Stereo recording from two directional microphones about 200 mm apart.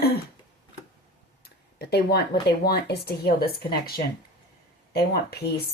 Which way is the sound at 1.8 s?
50° left (ahead or behind).